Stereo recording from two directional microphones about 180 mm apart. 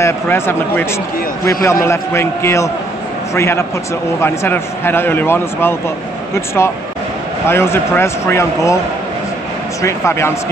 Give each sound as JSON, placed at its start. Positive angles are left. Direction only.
{"t": 0.0, "sound": "a man's voice", "side_deg": 10}
{"t": 9.8, "sound": "a man's voice", "side_deg": 15}